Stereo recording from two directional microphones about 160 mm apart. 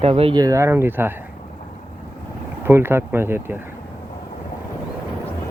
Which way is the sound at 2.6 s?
15° right (ahead or behind).